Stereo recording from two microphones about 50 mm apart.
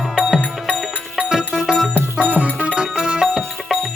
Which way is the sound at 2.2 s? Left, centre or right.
Right.